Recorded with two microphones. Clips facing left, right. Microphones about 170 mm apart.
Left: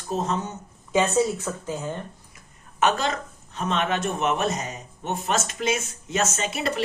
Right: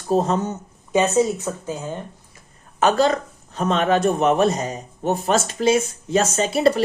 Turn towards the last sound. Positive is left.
turn(degrees=-35)  # may be behind; listen again after turning